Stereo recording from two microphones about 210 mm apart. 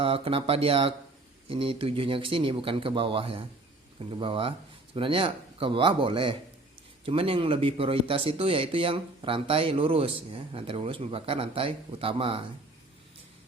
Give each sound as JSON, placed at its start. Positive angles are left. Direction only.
{"t": 0.0, "sound": "speech", "side_deg": -25}